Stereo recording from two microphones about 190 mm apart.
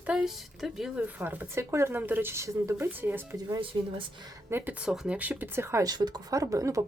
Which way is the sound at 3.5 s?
25° right (ahead or behind).